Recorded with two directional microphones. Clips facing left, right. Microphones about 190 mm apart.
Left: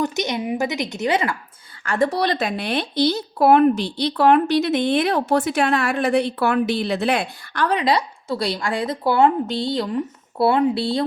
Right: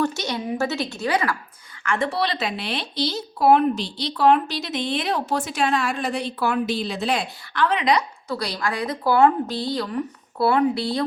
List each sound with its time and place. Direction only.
0.0 s a woman's voice: 20° left (ahead or behind)
1.8 s speech: 40° left (ahead or behind)